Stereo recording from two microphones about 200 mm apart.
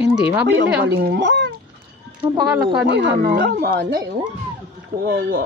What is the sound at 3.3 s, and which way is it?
Speech, 50° right (ahead or behind).